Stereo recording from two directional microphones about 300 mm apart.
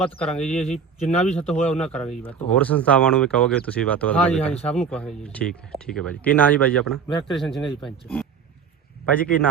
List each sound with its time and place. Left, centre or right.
0.0 s speech: centre
0.9 s speech: left
1.8 s speech: centre